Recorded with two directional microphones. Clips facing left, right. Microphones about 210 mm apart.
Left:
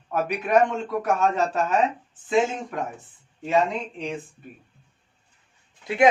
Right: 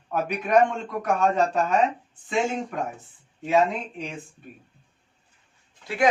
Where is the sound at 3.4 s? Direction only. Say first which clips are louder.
Right 1 dB; centre (ahead or behind).